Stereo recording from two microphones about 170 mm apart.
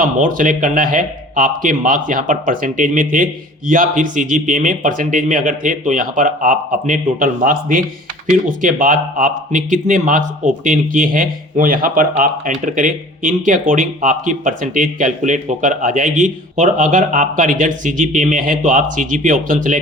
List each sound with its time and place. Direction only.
0.0 s speech: 50° right (ahead or behind)